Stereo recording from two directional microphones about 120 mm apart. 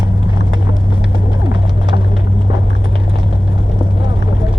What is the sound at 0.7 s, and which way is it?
Vehicle, 45° right (ahead or behind).